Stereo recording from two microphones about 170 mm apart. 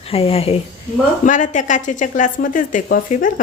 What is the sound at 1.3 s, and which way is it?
Speech, 45° left (ahead or behind).